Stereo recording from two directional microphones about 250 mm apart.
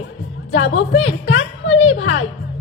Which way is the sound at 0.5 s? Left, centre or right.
Left.